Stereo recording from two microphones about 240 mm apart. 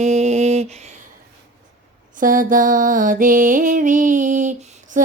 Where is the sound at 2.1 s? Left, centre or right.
Right.